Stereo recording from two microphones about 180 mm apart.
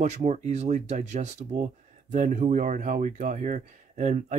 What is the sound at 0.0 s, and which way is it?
Speech, 40° right (ahead or behind).